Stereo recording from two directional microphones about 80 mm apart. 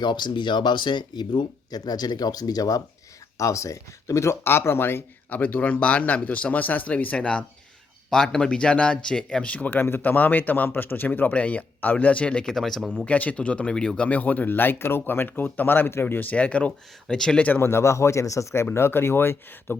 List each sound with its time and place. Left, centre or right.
0.0 s speech: left
3.3 s speech: left; by 12.9 s centre
13.1 s speech: centre
17.6 s speech: left